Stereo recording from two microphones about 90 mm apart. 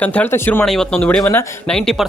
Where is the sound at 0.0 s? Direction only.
15° left (ahead or behind).